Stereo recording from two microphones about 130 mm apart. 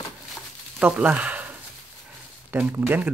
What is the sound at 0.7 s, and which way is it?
Speech, 10° right (ahead or behind).